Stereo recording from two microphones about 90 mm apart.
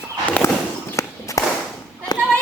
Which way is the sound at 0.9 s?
35° left (ahead or behind).